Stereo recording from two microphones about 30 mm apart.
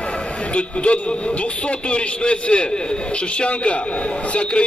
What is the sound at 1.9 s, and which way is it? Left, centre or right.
A man's voice, left.